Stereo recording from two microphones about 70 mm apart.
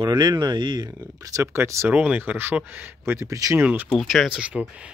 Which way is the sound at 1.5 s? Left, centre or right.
Right.